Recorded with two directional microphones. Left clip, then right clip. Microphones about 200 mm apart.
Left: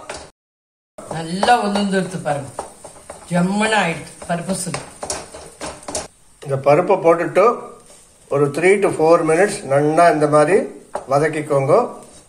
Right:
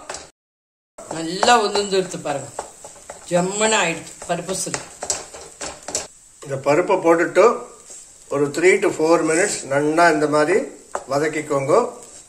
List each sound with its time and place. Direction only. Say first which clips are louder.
1.1 s speech: even; 60° right (ahead or behind)
6.5 s a man's voice: left 3 dB; centre (ahead or behind)